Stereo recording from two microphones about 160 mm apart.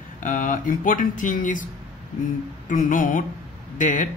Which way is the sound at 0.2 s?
55° left (ahead or behind).